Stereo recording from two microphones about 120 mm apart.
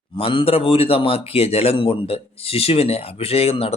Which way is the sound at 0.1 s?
45° left (ahead or behind).